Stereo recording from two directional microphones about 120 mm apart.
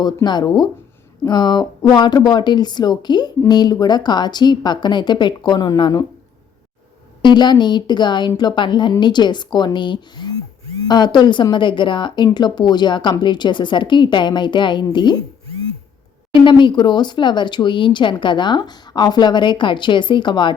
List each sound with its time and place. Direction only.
0.0 s speech: 35° left (ahead or behind)
7.2 s speech: 40° left (ahead or behind)
16.4 s speech: 40° left (ahead or behind)